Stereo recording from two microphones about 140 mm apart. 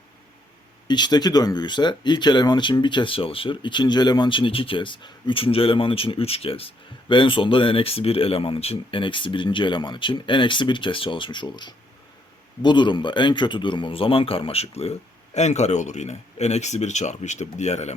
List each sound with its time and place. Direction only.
0.9 s speech: 30° left (ahead or behind); by 17.9 s 55° left (ahead or behind)